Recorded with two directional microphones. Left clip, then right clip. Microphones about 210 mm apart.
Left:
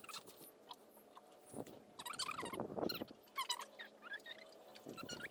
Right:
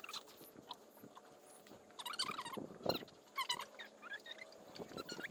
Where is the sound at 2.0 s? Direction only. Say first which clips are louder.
Right 2 dB; 5° right (ahead or behind).